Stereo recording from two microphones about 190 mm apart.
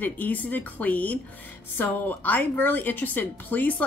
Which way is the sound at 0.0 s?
10° left (ahead or behind).